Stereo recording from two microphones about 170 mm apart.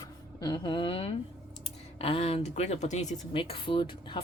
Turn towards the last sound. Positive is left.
turn(degrees=30)  # may be behind; listen again after turning